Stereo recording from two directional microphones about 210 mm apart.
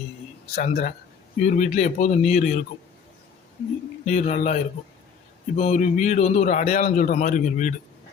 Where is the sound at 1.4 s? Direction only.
35° left (ahead or behind).